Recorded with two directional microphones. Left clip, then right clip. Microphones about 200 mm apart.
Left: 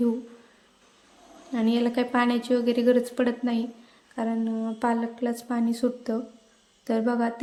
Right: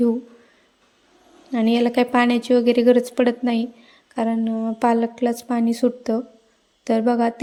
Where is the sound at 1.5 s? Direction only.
35° right (ahead or behind).